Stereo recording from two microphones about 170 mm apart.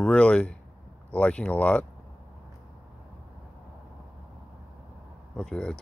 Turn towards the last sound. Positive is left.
turn(degrees=5)  # may be behind; listen again after turning